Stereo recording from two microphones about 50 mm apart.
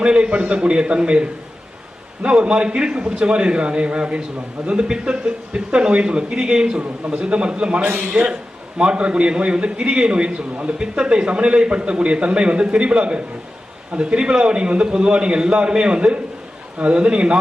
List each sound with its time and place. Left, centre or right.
0.0 s a man's voice: centre
7.9 s a man's voice: right
8.8 s a man's voice: right